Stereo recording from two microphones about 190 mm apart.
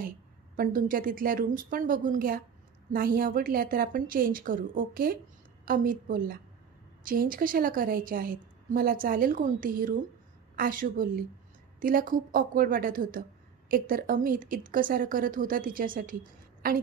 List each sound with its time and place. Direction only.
0.6 s a woman's voice: 45° right (ahead or behind)